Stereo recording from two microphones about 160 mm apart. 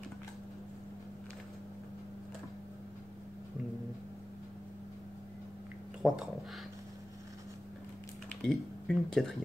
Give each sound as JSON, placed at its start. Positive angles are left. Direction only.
{"t": 6.0, "sound": "speech", "side_deg": -20}
{"t": 8.4, "sound": "speech", "side_deg": 5}